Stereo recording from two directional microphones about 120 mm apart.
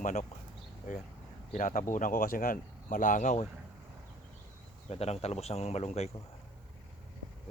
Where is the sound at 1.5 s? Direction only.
90° left.